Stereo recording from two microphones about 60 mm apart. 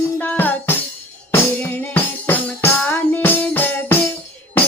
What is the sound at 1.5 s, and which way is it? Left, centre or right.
Music, left.